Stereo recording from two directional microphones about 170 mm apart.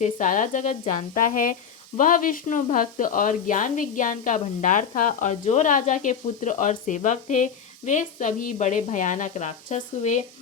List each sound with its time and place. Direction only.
0.0 s speech: 50° left (ahead or behind)